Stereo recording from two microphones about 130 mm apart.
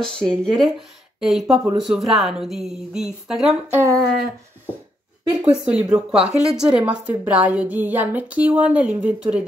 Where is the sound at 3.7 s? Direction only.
20° right (ahead or behind).